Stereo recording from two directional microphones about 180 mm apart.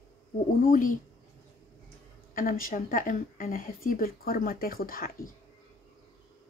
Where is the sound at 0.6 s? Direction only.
50° left (ahead or behind).